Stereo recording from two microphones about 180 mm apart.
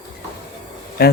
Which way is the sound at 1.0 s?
55° left (ahead or behind).